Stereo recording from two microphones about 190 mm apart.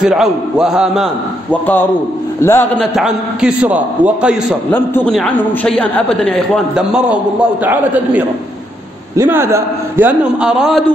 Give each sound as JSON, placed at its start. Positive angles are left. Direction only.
{"t": 0.0, "sound": "a man's voice", "side_deg": -5}
{"t": 1.5, "sound": "a man's voice", "side_deg": 10}
{"t": 2.8, "sound": "a man's voice", "side_deg": -5}
{"t": 4.7, "sound": "a man's voice", "side_deg": 10}